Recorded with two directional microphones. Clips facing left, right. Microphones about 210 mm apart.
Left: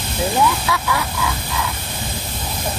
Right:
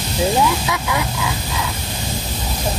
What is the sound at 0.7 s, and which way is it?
Speech, 20° right (ahead or behind).